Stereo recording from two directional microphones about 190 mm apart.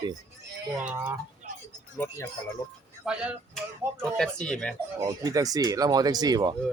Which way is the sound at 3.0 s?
5° right (ahead or behind).